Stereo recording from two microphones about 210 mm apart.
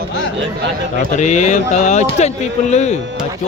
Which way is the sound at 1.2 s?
35° left (ahead or behind).